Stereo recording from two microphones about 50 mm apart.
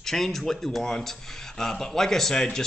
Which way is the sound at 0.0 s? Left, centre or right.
Centre.